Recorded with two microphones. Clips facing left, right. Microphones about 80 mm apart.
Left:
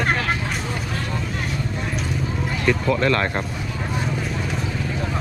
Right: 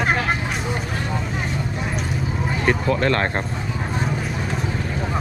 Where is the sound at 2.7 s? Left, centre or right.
Right.